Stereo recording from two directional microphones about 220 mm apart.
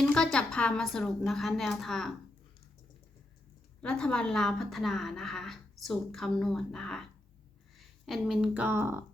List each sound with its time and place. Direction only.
0.1 s a woman's voice: 5° left (ahead or behind)
3.8 s a woman's voice: 5° left (ahead or behind)